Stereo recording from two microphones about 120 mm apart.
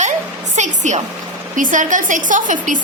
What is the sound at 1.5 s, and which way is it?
A woman's voice, 90° right.